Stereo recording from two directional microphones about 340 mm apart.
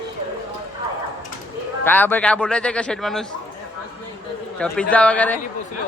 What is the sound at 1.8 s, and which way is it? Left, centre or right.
Speech, centre.